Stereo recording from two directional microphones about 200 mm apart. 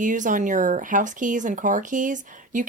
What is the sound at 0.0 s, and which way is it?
Speech, 40° right (ahead or behind).